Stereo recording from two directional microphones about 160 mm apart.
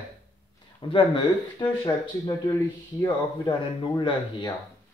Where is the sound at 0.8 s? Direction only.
30° left (ahead or behind).